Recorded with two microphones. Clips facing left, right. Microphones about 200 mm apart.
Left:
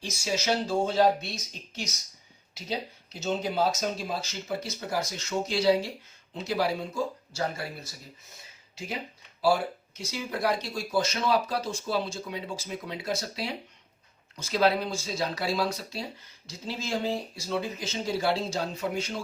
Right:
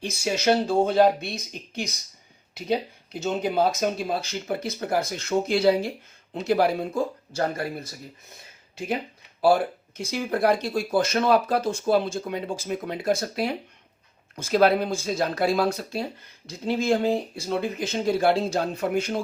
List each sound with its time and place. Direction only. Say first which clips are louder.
0.0 s speech: right 6 dB; 60° right (ahead or behind)
10.0 s speech: right 6 dB; 55° right (ahead or behind)